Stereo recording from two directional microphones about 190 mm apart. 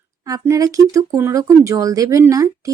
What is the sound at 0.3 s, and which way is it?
Speech, 15° right (ahead or behind).